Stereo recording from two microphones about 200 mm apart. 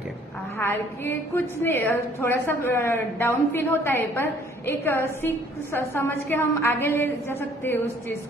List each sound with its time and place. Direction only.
0.6 s a woman's voice: 10° left (ahead or behind)